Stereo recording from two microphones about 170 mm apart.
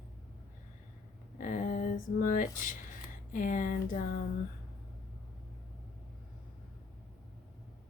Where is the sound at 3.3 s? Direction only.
50° left (ahead or behind).